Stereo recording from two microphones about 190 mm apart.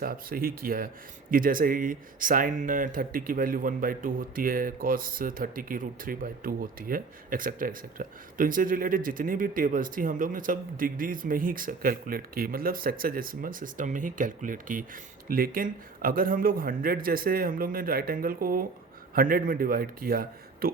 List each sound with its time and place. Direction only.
0.0 s speech: 50° right (ahead or behind)